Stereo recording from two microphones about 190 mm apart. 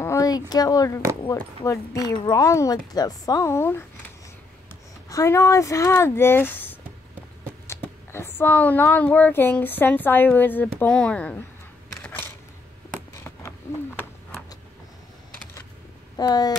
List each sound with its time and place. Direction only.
0.0 s speech: 15° left (ahead or behind)
5.1 s speech: 15° left (ahead or behind)
12.0 s a sound: 10° left (ahead or behind)
16.2 s speech: 20° left (ahead or behind)